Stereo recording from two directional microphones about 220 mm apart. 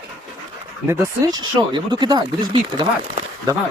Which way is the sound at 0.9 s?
15° right (ahead or behind).